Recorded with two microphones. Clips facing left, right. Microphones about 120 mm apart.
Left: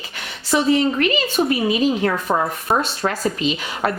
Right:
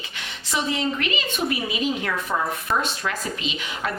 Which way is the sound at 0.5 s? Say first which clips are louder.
Left 8 dB; 40° left (ahead or behind).